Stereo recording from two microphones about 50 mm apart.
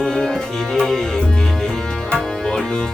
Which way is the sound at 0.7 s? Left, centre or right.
Centre.